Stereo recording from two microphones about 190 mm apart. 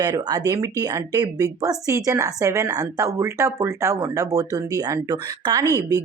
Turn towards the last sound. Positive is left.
turn(degrees=-20)  # may be behind; listen again after turning